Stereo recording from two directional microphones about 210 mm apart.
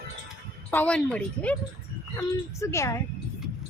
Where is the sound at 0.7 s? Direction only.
5° left (ahead or behind).